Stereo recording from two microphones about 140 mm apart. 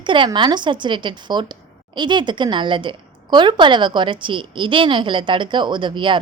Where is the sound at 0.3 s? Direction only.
35° right (ahead or behind).